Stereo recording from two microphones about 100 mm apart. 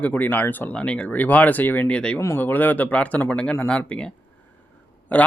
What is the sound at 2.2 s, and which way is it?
Speech, 25° left (ahead or behind).